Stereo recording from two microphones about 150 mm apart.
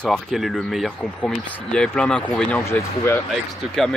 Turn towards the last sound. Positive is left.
turn(degrees=0)  # may be behind; listen again after turning